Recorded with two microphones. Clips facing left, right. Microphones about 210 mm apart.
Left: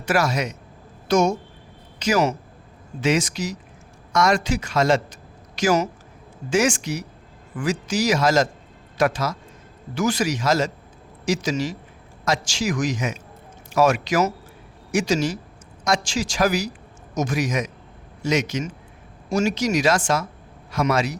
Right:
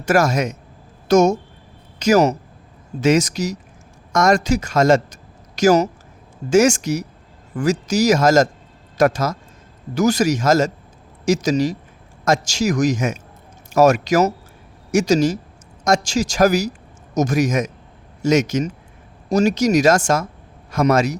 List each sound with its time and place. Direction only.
0.0 s speech: 45° right (ahead or behind)